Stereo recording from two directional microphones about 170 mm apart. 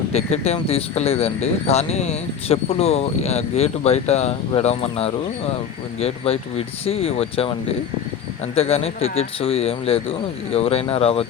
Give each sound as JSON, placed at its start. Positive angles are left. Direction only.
{"t": 0.1, "sound": "speech", "side_deg": 40}
{"t": 8.5, "sound": "speech", "side_deg": 35}